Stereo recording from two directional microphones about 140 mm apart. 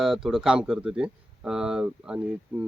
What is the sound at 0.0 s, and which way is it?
Speech, centre (ahead or behind).